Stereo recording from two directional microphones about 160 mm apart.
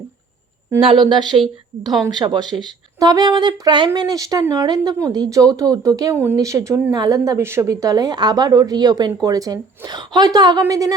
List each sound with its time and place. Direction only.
0.8 s speech: 30° right (ahead or behind)